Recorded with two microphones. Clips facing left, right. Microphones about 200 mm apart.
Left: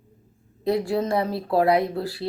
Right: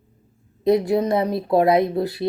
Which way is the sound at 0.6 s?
20° right (ahead or behind).